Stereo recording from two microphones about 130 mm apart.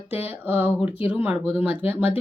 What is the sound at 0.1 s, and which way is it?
Speech, 15° right (ahead or behind).